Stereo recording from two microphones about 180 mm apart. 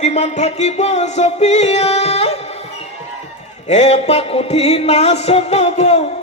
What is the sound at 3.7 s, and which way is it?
Music, 40° left (ahead or behind).